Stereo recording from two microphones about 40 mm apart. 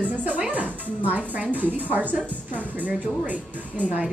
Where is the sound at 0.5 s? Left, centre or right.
Right.